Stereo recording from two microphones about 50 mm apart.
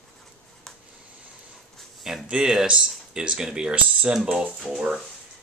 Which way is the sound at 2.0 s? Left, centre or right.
Centre.